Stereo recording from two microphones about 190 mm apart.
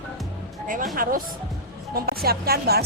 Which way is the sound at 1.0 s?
50° right (ahead or behind).